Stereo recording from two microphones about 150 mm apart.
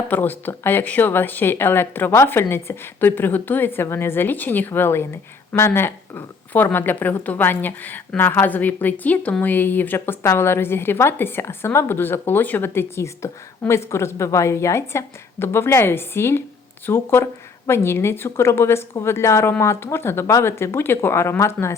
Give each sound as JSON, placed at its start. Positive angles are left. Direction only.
{"t": 0.1, "sound": "a woman's voice", "side_deg": 10}